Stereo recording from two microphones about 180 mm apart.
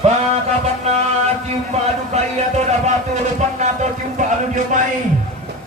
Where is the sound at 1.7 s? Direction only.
35° right (ahead or behind).